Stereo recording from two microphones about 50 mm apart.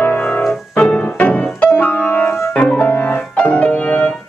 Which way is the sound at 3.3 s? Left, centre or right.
Left.